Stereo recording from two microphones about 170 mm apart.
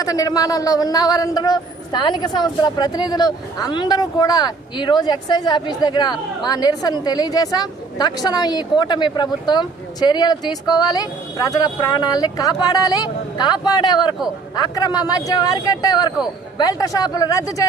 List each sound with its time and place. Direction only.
0.0 s speech: 20° left (ahead or behind)